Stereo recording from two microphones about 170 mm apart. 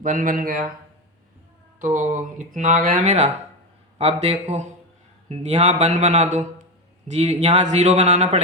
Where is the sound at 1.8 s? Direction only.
50° right (ahead or behind).